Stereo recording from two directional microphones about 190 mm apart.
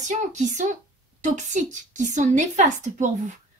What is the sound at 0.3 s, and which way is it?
Speech, 40° right (ahead or behind).